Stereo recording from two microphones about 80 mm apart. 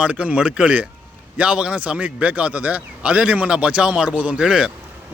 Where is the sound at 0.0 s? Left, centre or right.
Centre.